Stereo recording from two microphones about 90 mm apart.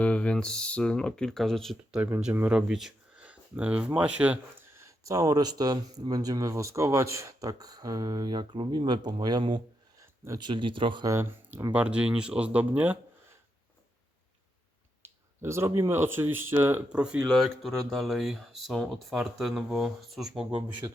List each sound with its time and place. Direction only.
0.0 s speech: 15° left (ahead or behind)
2.3 s speech: 15° right (ahead or behind)
5.0 s speech: 40° right (ahead or behind)
10.4 s speech: 70° right (ahead or behind)
11.0 s speech: 35° right (ahead or behind)
11.7 s speech: 15° right (ahead or behind)
15.0 s speech: 30° right (ahead or behind)
16.9 s speech: 10° right (ahead or behind)
17.3 s speech: centre (ahead or behind)
20.8 s speech: 35° right (ahead or behind)